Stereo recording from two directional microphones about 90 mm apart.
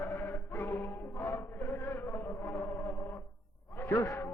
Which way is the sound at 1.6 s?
25° left (ahead or behind).